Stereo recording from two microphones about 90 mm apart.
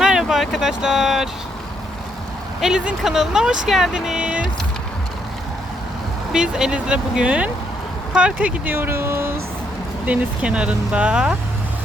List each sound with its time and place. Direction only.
0.0 s vehicle: 5° right (ahead or behind)
2.6 s speech: 5° right (ahead or behind)
6.3 s speech: 10° right (ahead or behind); by 9.3 s 25° right (ahead or behind)
10.1 s speech: 10° right (ahead or behind)